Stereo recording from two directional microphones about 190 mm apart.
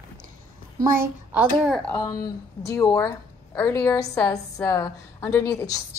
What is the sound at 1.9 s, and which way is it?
A woman's voice, 20° left (ahead or behind).